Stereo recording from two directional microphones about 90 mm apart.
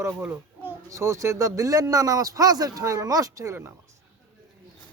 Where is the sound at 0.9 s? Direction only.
35° right (ahead or behind).